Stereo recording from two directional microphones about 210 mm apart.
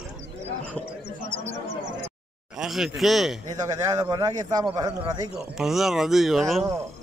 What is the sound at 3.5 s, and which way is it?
A man's voice, 15° right (ahead or behind).